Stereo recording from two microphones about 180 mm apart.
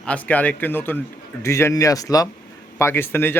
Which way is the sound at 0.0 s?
10° left (ahead or behind).